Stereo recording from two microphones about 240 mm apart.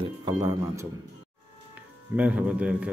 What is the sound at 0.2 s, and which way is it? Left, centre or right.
Speech, centre.